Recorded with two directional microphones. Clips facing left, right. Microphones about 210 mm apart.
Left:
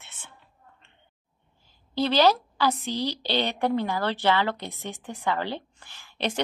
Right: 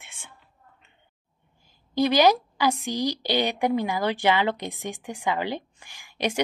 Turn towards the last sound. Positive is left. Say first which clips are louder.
# right 2 dB
turn(degrees=-10)  # may be behind; listen again after turning